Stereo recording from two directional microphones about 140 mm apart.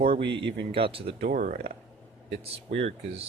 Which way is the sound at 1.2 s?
75° right (ahead or behind).